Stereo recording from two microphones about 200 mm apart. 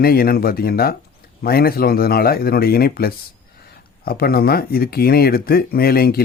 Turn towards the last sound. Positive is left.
turn(degrees=50)  # may be behind; listen again after turning